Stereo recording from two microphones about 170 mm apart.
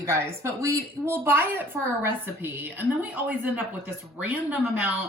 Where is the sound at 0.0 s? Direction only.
15° right (ahead or behind).